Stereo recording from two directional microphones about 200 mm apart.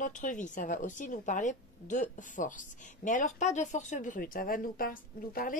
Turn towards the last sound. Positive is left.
turn(degrees=45)  # may be behind; listen again after turning